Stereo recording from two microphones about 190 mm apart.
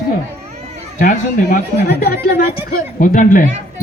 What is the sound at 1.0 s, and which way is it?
Speech, 45° left (ahead or behind).